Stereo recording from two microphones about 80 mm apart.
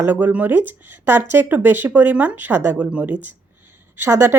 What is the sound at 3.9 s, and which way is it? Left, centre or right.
Speech, right.